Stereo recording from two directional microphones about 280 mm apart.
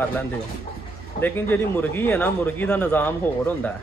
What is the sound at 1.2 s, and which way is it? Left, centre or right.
Speech, centre.